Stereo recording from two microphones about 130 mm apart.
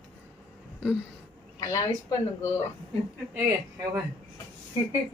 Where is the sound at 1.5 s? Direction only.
25° left (ahead or behind).